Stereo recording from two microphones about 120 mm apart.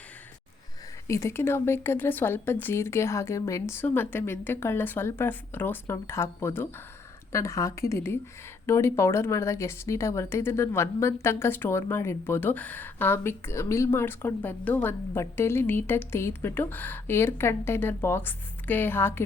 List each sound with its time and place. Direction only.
1.0 s a woman's voice: 25° left (ahead or behind)